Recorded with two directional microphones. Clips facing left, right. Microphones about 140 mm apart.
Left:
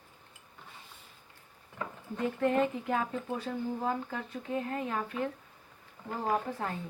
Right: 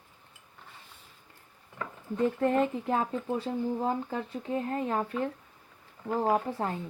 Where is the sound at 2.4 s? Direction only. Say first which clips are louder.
Left 2 dB; 35° right (ahead or behind).